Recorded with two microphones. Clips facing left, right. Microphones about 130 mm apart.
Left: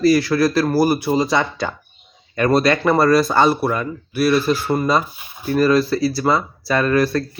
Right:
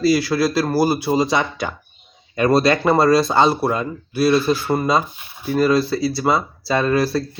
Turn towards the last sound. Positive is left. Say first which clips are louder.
# left 1 dB
turn(degrees=-25)  # may be behind; listen again after turning